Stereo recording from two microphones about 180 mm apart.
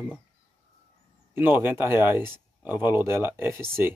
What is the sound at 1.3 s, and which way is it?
Speech, 10° right (ahead or behind).